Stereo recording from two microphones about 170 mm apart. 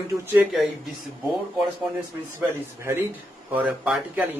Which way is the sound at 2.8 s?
15° right (ahead or behind).